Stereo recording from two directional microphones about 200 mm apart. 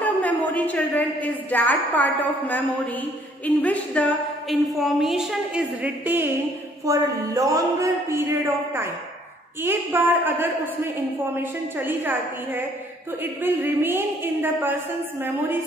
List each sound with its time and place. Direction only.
0.0 s a woman's voice: 10° left (ahead or behind); by 15.6 s 10° right (ahead or behind)